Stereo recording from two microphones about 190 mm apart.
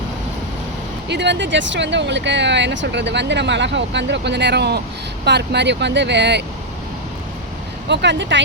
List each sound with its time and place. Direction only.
1.0 s speech: 65° right (ahead or behind)
7.9 s speech: 70° right (ahead or behind)